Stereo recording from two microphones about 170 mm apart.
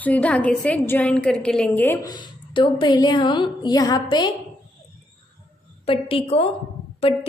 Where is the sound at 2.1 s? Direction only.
30° left (ahead or behind).